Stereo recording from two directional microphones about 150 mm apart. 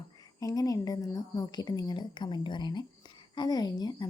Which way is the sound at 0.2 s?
25° left (ahead or behind).